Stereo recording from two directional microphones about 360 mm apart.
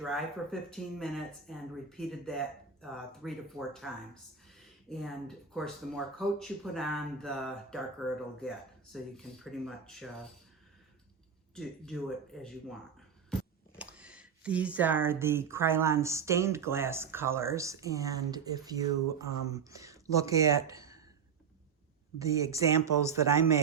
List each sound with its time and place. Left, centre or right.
0.0 s speech: centre
11.5 s speech: centre
22.2 s speech: centre